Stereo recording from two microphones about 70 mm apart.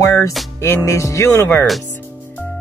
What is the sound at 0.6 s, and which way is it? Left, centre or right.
Speech, left.